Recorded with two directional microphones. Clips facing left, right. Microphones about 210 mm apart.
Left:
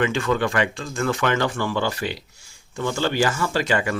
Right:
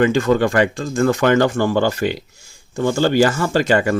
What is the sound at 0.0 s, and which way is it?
Speech, 40° right (ahead or behind).